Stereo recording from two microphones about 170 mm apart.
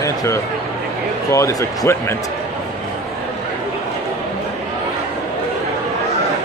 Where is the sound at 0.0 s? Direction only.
20° left (ahead or behind).